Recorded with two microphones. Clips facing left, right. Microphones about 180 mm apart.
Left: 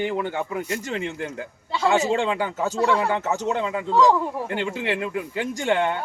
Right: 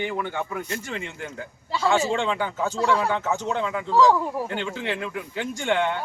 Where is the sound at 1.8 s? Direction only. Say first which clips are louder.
Left 2 dB; 20° left (ahead or behind).